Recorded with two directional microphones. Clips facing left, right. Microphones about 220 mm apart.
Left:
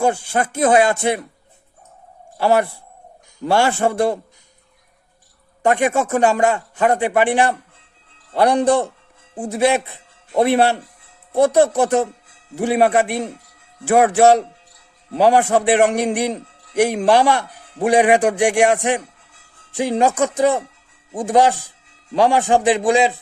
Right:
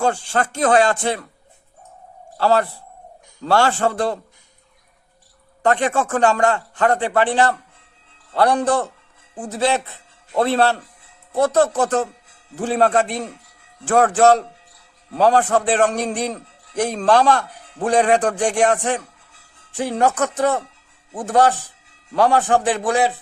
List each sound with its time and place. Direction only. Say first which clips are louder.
0.0 s a man's voice: left 2 dB; 10° left (ahead or behind)
2.4 s a man's voice: left 1 dB; 15° left (ahead or behind)
5.6 s a man's voice: left 2 dB; 10° left (ahead or behind)